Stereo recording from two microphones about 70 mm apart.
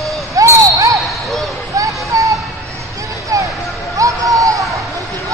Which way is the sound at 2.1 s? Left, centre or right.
Right.